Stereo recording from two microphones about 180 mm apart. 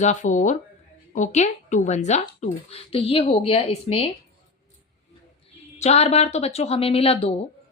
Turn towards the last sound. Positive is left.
turn(degrees=35)  # may be behind; listen again after turning